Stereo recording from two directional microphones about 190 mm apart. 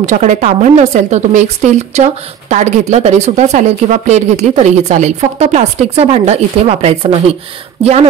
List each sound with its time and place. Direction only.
0.0 s speech: 40° right (ahead or behind)